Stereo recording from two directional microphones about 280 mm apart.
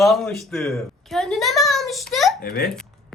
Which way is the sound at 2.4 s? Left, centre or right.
Left.